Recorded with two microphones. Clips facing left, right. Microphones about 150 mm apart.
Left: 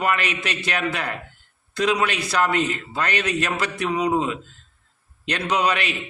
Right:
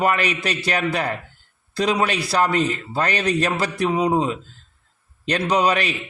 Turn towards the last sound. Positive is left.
turn(degrees=-40)  # may be behind; listen again after turning